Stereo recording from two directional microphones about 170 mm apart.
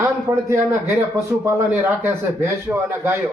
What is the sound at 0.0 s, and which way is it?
A man's voice, 15° right (ahead or behind).